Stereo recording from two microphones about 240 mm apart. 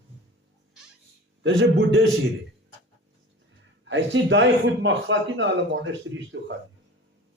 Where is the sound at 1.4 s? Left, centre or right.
Right.